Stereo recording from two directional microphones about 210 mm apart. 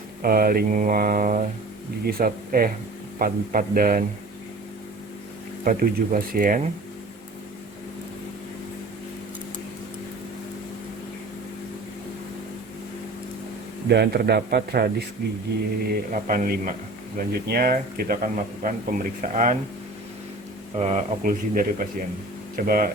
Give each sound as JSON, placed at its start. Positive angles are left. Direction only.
{"t": 0.2, "sound": "mantra", "side_deg": -45}
{"t": 3.2, "sound": "speech", "side_deg": -40}
{"t": 5.6, "sound": "speech", "side_deg": -40}
{"t": 13.8, "sound": "mantra", "side_deg": -50}
{"t": 17.2, "sound": "speech", "side_deg": -45}
{"t": 20.7, "sound": "speech", "side_deg": -35}
{"t": 22.5, "sound": "mantra", "side_deg": -45}